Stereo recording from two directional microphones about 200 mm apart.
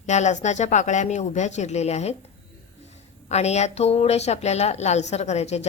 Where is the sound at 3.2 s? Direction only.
35° left (ahead or behind).